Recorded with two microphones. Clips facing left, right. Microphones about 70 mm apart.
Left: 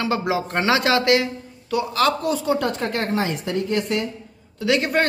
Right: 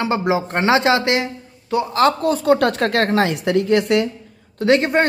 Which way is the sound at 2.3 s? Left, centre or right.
Right.